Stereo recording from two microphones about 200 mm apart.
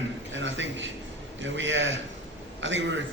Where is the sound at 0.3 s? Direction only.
70° right (ahead or behind).